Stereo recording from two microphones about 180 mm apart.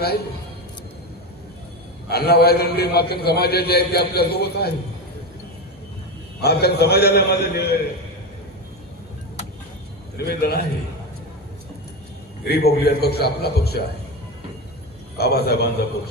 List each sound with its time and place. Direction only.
2.0 s a man's voice: 60° left (ahead or behind)
6.4 s a man's voice: 65° left (ahead or behind)
10.1 s a man's voice: 60° left (ahead or behind)
12.4 s a man's voice: 60° left (ahead or behind)
15.1 s a man's voice: 60° left (ahead or behind)